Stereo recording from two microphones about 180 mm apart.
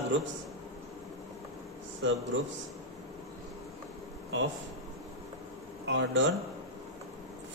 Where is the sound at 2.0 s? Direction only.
90° right.